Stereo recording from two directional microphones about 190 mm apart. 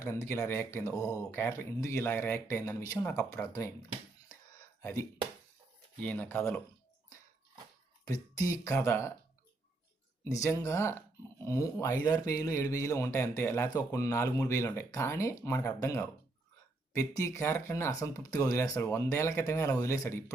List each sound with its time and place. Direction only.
0.0 s speech: 15° left (ahead or behind)
4.8 s speech: 15° left (ahead or behind)
8.0 s speech: 20° left (ahead or behind)
10.2 s speech: 15° left (ahead or behind)